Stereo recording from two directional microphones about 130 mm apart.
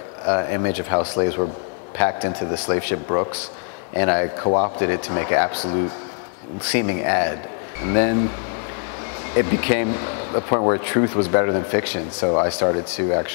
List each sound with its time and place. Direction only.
0.3 s speech: 25° left (ahead or behind)
6.7 s speech: 15° left (ahead or behind)
9.3 s speech: 20° left (ahead or behind)